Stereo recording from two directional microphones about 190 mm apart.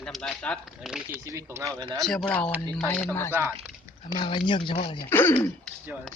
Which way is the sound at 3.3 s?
10° right (ahead or behind).